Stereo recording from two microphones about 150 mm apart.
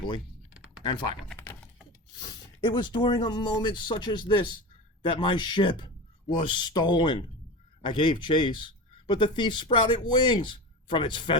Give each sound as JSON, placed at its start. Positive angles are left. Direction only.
{"t": 0.5, "sound": "typing", "side_deg": -5}
{"t": 0.8, "sound": "speech", "side_deg": 30}
{"t": 2.6, "sound": "speech", "side_deg": 30}